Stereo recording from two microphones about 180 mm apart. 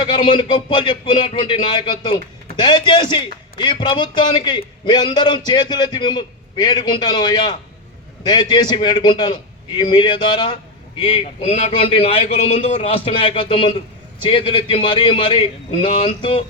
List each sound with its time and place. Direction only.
0.0 s speech: 25° left (ahead or behind)